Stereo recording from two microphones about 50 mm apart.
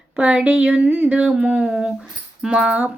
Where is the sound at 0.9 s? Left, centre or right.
Right.